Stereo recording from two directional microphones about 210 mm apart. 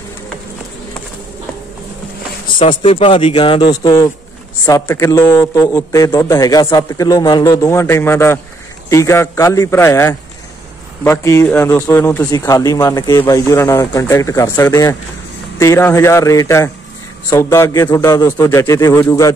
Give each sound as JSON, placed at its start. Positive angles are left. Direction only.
{"t": 2.6, "sound": "a man's voice", "side_deg": 25}